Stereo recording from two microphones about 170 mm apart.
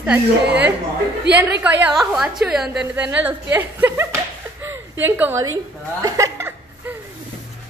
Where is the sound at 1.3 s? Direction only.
80° right.